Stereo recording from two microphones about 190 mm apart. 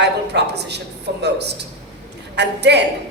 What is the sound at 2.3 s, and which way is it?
Speech, 65° right (ahead or behind).